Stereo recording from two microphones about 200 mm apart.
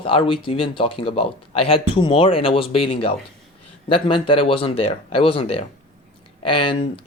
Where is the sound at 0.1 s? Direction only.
25° left (ahead or behind).